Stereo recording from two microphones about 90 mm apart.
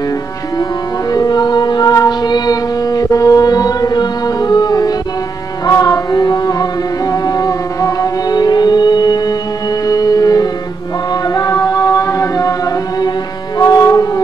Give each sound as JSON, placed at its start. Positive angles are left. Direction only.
{"t": 1.1, "sound": "music", "side_deg": 50}
{"t": 13.6, "sound": "music", "side_deg": 40}